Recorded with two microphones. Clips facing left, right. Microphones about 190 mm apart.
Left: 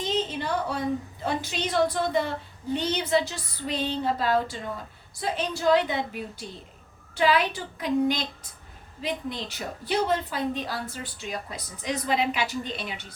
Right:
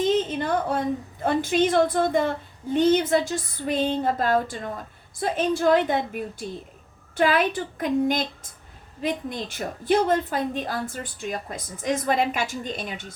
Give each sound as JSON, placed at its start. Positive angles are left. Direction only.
{"t": 0.0, "sound": "a woman's voice", "side_deg": -50}